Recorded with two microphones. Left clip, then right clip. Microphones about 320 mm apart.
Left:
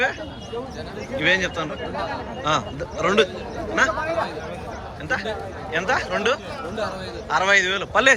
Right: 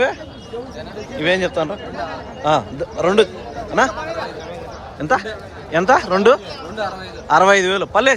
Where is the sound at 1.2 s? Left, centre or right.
Centre.